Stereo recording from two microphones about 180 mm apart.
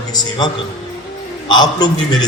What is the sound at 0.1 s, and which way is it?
A man's voice, 25° left (ahead or behind).